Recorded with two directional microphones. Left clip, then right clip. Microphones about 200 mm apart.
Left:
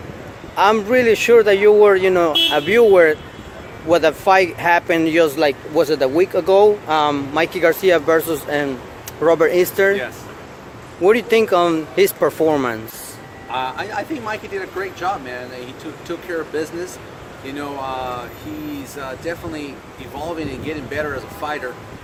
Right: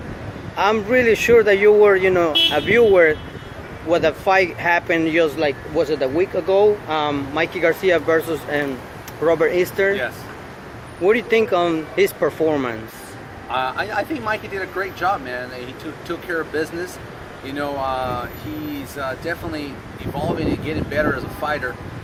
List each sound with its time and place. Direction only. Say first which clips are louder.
0.5 s speech: left 3 dB; 20° left (ahead or behind)
11.0 s speech: left 2 dB; 25° left (ahead or behind)
13.5 s speech: right 1 dB; 5° right (ahead or behind)